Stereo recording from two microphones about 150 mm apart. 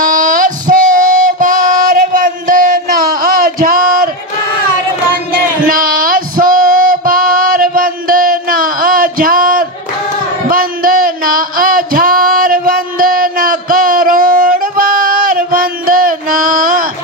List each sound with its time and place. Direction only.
0.0 s child singing: 60° right (ahead or behind)
1.2 s music: 60° right (ahead or behind)
5.7 s female singing: 70° right (ahead or behind)
10.5 s a sound: 70° right (ahead or behind)